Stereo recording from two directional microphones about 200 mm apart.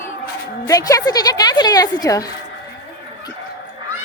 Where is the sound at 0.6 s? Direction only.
15° left (ahead or behind).